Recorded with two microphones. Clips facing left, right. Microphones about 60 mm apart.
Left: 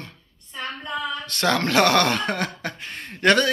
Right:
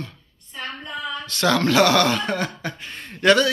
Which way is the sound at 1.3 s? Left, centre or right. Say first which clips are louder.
Right 3 dB; left.